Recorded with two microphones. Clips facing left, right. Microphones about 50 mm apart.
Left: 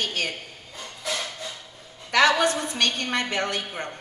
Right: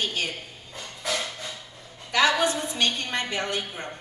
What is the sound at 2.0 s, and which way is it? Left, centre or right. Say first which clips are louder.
A woman's voice: left 2 dB; left.